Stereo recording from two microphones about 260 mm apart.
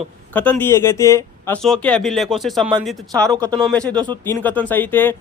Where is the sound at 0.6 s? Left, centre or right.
Centre.